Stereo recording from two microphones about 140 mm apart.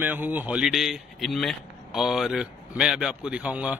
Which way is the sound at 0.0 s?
15° right (ahead or behind).